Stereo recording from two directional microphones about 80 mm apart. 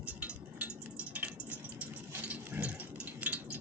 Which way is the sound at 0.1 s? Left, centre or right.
Centre.